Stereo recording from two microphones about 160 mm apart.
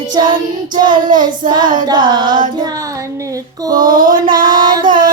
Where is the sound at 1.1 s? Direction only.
25° right (ahead or behind).